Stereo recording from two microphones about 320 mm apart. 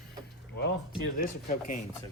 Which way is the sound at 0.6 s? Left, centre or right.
Left.